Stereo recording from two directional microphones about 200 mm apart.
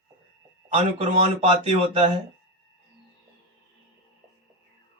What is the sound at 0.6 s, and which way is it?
Speech, 30° right (ahead or behind).